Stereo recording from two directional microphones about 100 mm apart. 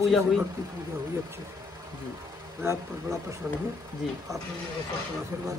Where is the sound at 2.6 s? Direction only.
30° right (ahead or behind).